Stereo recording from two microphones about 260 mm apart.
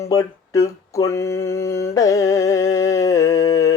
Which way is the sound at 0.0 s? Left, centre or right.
Centre.